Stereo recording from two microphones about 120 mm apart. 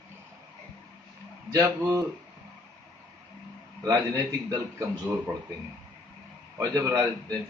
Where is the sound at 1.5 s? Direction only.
25° right (ahead or behind).